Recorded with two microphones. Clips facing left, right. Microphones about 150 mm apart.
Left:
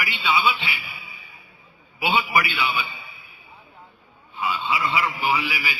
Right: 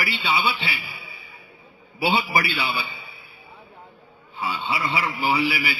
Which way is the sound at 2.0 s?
35° right (ahead or behind).